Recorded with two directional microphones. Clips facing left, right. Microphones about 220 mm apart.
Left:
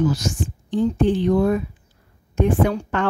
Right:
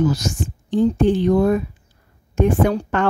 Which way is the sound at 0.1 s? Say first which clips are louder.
Right 1 dB; 40° right (ahead or behind).